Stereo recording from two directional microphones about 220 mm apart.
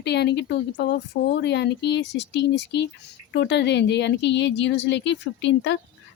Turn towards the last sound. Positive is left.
turn(degrees=55)  # may be behind; listen again after turning